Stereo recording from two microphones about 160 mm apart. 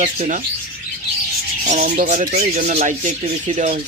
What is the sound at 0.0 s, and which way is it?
Speech, 50° right (ahead or behind).